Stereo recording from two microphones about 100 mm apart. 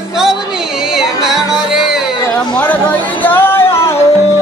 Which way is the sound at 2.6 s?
15° left (ahead or behind).